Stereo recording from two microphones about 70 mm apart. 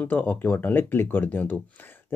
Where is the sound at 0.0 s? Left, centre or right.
Left.